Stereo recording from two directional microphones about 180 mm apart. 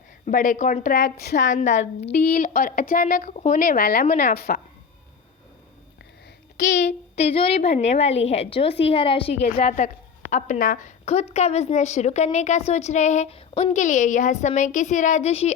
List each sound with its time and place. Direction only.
0.3 s a woman's voice: 50° left (ahead or behind); by 1.5 s 65° left (ahead or behind)
1.5 s a woman's voice: 45° left (ahead or behind)
2.1 s a woman's voice: 60° left (ahead or behind)
6.7 s a woman's voice: 40° left (ahead or behind)